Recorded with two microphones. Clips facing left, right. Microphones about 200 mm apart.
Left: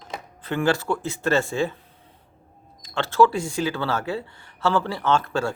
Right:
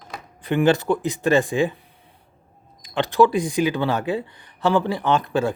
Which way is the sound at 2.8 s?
15° right (ahead or behind).